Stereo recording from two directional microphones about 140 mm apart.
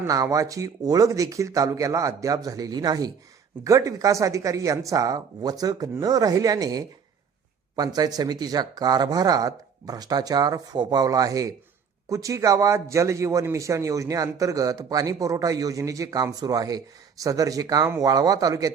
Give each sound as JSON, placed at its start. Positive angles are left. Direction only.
{"t": 0.0, "sound": "a man's voice", "side_deg": -25}